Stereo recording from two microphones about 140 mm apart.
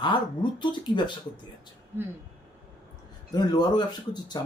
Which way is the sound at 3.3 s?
30° left (ahead or behind).